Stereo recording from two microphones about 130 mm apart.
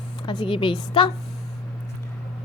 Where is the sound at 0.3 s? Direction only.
40° left (ahead or behind).